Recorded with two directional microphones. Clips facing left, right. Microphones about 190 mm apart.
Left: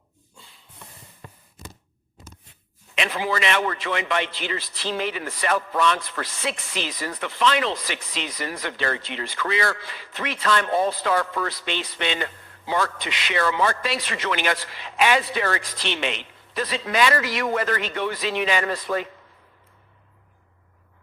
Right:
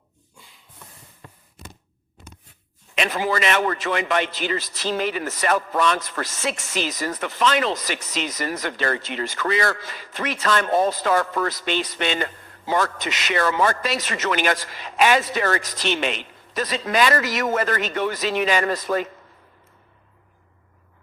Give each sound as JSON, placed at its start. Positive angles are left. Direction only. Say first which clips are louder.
{"t": 3.0, "sound": "a man's voice", "louder": "right 2 dB", "side_deg": -45}